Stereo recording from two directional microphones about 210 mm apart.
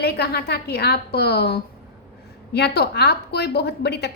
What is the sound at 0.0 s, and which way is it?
A woman's voice, 50° left (ahead or behind).